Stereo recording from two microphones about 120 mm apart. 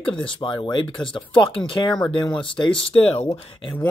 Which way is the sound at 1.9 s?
5° left (ahead or behind).